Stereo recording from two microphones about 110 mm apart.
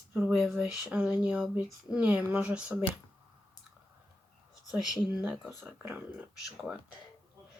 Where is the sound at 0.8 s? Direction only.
15° right (ahead or behind).